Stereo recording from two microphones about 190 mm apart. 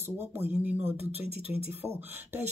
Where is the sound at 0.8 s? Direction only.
35° right (ahead or behind).